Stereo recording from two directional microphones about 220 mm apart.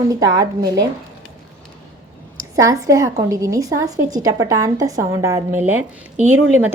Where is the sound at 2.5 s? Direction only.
15° right (ahead or behind).